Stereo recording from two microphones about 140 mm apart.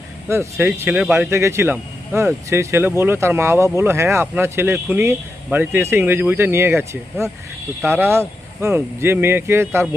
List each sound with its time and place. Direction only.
0.3 s speech: 20° right (ahead or behind)